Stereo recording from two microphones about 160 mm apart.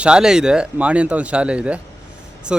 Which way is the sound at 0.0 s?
5° right (ahead or behind).